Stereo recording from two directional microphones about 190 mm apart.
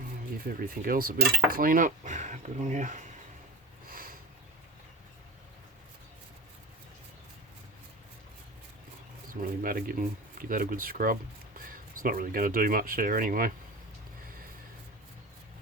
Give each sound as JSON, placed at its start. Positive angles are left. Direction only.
{"t": 0.4, "sound": "speech", "side_deg": -50}
{"t": 9.3, "sound": "speech", "side_deg": -45}